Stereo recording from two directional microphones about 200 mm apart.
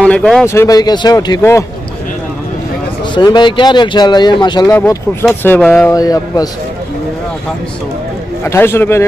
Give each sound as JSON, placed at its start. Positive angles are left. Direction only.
{"t": 0.0, "sound": "speech", "side_deg": 5}
{"t": 0.5, "sound": "speech", "side_deg": 15}
{"t": 3.2, "sound": "speech", "side_deg": 20}
{"t": 5.3, "sound": "speech", "side_deg": 10}
{"t": 8.5, "sound": "speech", "side_deg": 10}